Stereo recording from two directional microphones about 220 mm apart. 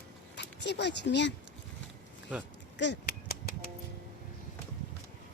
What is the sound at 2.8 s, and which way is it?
Cap gun, 50° left (ahead or behind).